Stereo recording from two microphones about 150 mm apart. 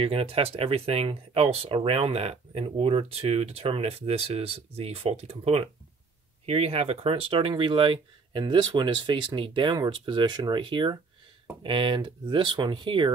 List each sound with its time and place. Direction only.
0.0 s speech: 40° right (ahead or behind)